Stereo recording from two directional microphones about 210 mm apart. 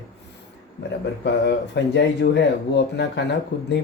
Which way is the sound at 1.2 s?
55° left (ahead or behind).